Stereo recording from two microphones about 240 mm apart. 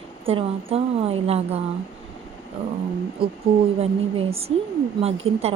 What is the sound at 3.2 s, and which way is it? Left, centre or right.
Speech, right.